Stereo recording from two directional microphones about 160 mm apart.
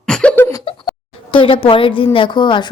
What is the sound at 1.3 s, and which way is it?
A woman's voice, 30° left (ahead or behind).